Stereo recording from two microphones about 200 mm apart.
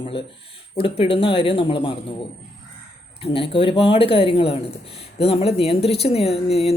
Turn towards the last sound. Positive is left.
turn(degrees=30)  # may be behind; listen again after turning